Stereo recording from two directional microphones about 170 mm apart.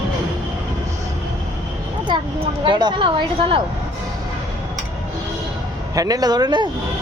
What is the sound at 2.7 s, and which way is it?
Speech, 25° right (ahead or behind).